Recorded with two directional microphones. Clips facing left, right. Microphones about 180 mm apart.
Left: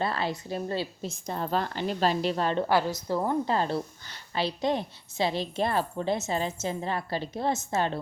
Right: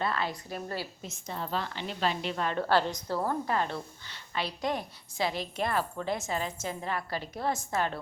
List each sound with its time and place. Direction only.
0.0 s a woman's voice: 30° left (ahead or behind)
1.3 s a woman's voice: 45° left (ahead or behind)
2.6 s a woman's voice: 10° left (ahead or behind)
3.4 s a woman's voice: 30° left (ahead or behind)
4.4 s a woman's voice: 25° left (ahead or behind)